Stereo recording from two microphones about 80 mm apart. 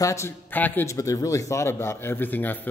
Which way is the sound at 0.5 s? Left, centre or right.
Left.